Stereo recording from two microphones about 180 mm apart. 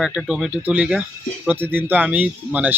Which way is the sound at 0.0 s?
5° right (ahead or behind).